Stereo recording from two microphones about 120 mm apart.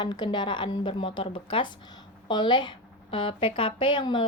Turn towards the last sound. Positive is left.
turn(degrees=40)  # may be behind; listen again after turning